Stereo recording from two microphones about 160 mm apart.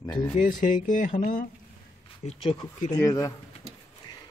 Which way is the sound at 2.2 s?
45° left (ahead or behind).